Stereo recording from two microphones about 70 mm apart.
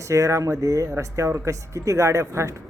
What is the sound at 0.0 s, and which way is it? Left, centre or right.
A man's voice, right.